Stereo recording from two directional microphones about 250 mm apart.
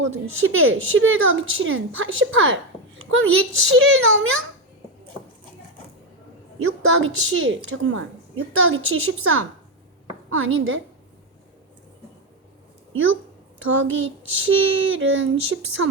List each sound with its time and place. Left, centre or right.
0.0 s a woman's voice: right
0.3 s a woman's voice: right
6.6 s a woman's voice: right
12.9 s a woman's voice: right